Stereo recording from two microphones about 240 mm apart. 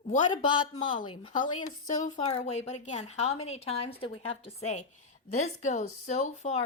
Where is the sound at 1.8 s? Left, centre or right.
Left.